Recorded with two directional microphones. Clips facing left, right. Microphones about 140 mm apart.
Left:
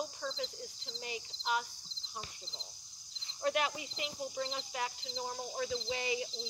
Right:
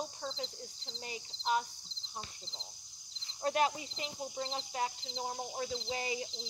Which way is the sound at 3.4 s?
35° right (ahead or behind).